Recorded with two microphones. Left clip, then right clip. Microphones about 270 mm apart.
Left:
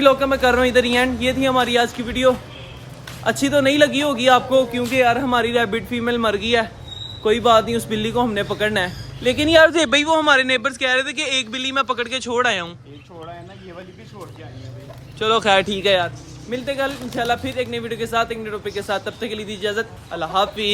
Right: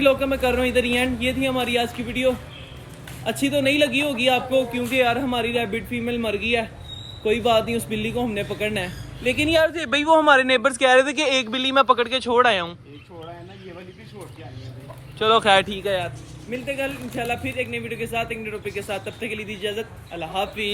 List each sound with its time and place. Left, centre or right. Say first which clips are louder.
0.0 s speech: left 4 dB; centre
3.4 s speech: left 4 dB; centre
9.6 s speech: left 11 dB; left
9.9 s a man's voice: even; centre
15.2 s speech: even; centre